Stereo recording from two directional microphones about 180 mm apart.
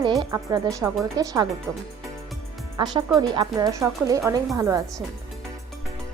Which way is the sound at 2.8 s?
25° right (ahead or behind).